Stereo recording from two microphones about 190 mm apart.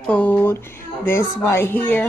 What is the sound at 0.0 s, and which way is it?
Speech, 5° left (ahead or behind).